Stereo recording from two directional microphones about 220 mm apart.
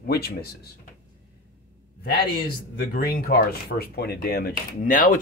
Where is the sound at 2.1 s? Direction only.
45° left (ahead or behind).